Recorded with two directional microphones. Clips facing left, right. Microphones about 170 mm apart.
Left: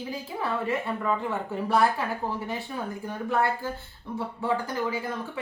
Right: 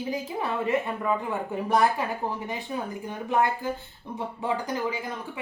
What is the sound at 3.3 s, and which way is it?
A woman's voice, 15° right (ahead or behind).